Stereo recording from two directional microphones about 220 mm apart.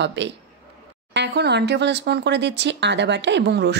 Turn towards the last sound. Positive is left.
turn(degrees=-50)  # may be behind; listen again after turning